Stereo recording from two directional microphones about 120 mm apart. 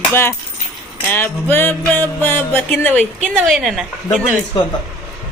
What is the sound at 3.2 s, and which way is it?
Speech, centre (ahead or behind).